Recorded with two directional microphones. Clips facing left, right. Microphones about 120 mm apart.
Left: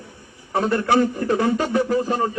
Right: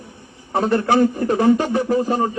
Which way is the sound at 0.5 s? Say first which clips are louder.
Right 2 dB; 35° right (ahead or behind).